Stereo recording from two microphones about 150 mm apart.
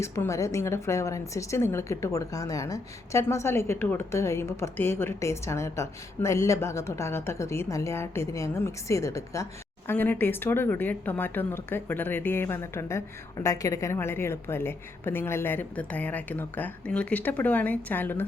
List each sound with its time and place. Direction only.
0.0 s a woman's voice: 20° left (ahead or behind)